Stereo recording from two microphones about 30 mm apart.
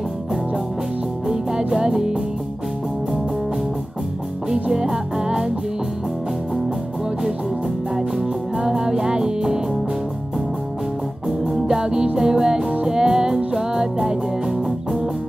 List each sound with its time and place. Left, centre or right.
1.2 s music: right
4.8 s music: centre
7.9 s music: centre
11.6 s music: right